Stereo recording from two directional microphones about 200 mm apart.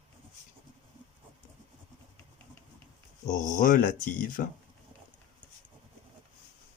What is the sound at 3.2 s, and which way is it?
Speech, 40° left (ahead or behind).